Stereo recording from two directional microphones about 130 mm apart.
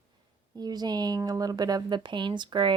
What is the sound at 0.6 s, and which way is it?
Speech, 30° right (ahead or behind).